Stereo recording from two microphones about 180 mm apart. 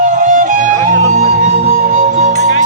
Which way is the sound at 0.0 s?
45° right (ahead or behind).